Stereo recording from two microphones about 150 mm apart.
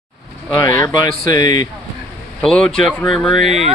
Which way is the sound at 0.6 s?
20° left (ahead or behind).